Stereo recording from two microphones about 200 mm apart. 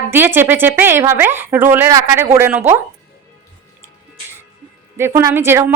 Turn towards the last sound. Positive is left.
turn(degrees=-10)  # may be behind; listen again after turning